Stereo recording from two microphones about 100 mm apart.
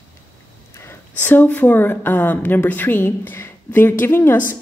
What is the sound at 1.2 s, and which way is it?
Speech, 20° left (ahead or behind).